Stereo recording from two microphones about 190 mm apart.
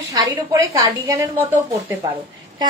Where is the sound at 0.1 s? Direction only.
15° right (ahead or behind).